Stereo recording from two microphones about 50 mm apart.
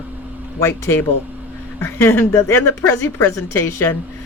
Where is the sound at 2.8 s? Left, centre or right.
Left.